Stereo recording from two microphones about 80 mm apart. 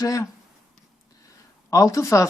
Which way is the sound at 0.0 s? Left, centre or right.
Left.